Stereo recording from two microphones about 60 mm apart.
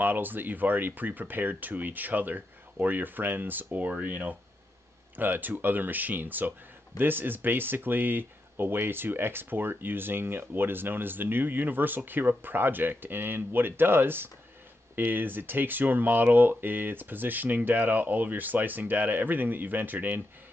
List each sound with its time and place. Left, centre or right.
0.0 s speech: right